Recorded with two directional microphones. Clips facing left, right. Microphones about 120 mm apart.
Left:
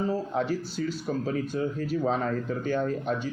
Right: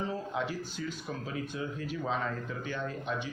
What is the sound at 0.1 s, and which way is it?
Speech, 40° left (ahead or behind).